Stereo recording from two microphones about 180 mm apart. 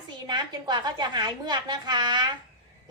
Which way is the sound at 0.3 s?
25° right (ahead or behind).